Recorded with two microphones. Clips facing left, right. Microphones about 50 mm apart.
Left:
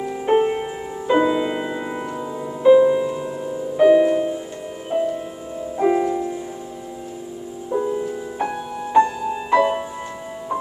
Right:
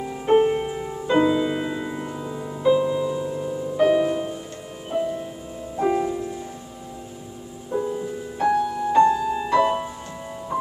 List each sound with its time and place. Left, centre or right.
0.0 s music: centre
2.2 s music: centre
2.6 s music: left; by 4.4 s centre
4.9 s music: centre
7.7 s music: centre